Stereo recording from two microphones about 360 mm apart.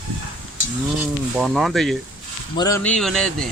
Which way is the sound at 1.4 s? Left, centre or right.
Centre.